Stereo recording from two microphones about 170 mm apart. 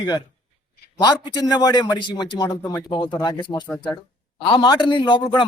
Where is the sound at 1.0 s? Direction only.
25° left (ahead or behind).